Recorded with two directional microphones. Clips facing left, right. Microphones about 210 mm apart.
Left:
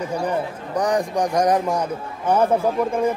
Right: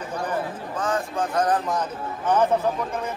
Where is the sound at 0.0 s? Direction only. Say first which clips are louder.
Left 4 dB; 10° left (ahead or behind).